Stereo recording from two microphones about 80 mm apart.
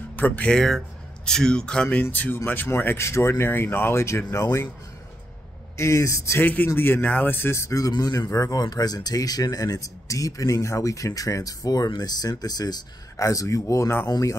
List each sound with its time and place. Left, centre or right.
0.1 s speech: left
0.5 s speech: centre
2.0 s speech: left
5.8 s speech: left
6.4 s speech: left
7.8 s speech: left